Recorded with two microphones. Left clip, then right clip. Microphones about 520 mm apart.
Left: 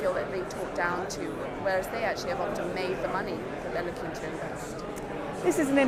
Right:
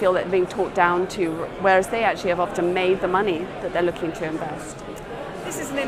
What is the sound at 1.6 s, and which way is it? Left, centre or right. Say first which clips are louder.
Speech: right 11 dB; right.